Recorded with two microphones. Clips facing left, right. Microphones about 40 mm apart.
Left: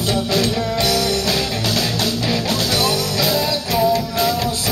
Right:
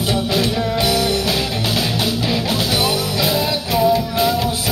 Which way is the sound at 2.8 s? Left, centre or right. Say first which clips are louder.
Even; right.